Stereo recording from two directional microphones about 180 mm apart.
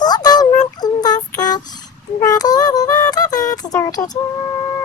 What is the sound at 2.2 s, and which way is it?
Music, 20° left (ahead or behind).